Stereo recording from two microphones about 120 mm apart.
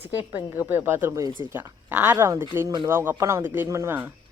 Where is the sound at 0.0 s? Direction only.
15° right (ahead or behind).